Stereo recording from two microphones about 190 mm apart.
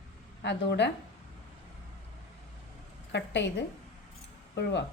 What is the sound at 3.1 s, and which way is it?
A woman's voice, 65° left (ahead or behind).